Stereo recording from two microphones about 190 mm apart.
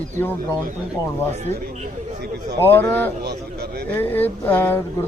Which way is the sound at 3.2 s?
60° right (ahead or behind).